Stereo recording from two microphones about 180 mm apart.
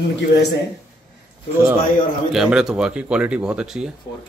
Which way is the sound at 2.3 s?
Centre (ahead or behind).